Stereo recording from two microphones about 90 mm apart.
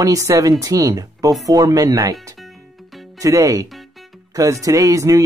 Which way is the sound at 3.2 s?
35° right (ahead or behind).